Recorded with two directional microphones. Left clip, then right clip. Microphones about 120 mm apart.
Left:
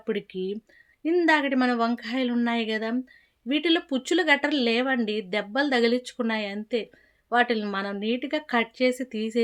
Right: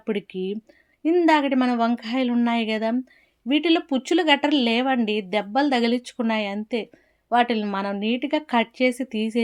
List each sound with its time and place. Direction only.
0.0 s speech: 30° right (ahead or behind)